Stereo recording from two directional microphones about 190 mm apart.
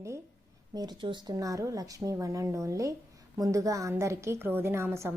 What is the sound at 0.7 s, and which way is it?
A woman's voice, 20° right (ahead or behind).